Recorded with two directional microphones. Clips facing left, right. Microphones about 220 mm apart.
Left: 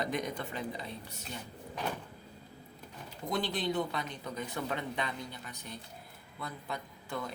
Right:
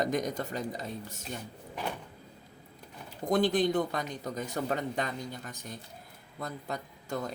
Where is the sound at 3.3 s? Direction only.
50° right (ahead or behind).